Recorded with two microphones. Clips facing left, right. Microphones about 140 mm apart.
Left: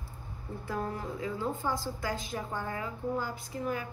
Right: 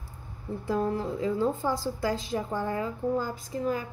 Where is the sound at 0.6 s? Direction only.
30° right (ahead or behind).